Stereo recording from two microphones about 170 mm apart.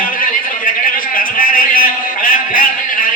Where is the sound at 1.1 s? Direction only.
55° left (ahead or behind).